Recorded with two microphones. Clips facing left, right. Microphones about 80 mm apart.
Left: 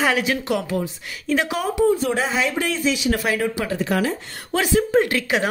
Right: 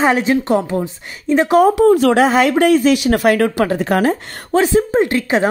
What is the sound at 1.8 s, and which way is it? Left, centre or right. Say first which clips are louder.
Speech: right 8 dB; right.